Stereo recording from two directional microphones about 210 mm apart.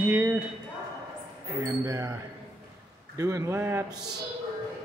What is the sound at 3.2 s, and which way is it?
Speech, 15° right (ahead or behind).